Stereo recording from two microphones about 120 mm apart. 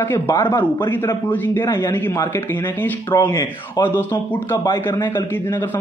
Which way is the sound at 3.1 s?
35° left (ahead or behind).